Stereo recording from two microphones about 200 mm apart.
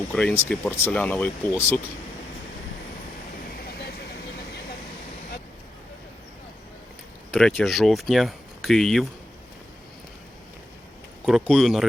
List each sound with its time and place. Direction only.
0.1 s speech: 5° left (ahead or behind)
7.3 s speech: 5° left (ahead or behind)
11.3 s speech: centre (ahead or behind)